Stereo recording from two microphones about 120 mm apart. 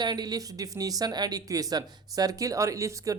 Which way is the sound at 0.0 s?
35° right (ahead or behind).